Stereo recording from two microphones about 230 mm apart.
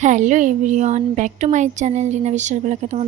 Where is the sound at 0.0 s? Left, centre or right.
Right.